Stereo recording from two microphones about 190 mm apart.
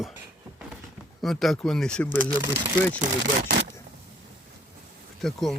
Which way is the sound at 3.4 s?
60° right (ahead or behind).